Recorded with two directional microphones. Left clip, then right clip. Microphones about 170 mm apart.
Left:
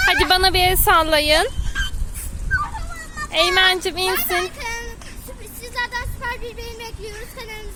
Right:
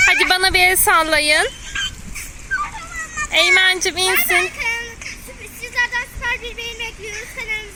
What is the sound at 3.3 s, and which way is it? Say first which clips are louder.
Speech: right 2 dB; centre (ahead or behind).